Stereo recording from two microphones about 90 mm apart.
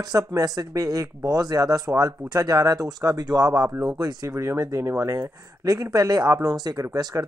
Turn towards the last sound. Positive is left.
turn(degrees=-40)  # may be behind; listen again after turning